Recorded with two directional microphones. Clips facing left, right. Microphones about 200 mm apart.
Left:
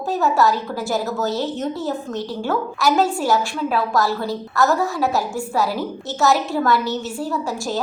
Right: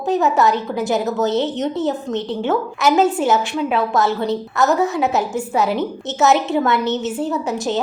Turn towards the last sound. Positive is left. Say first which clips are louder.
# right 3 dB
turn(degrees=-20)  # may be behind; listen again after turning